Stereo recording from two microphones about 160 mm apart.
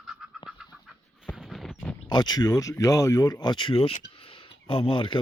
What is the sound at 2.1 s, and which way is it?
Speech, 25° left (ahead or behind).